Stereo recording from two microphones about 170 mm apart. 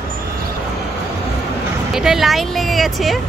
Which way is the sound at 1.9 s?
Centre (ahead or behind).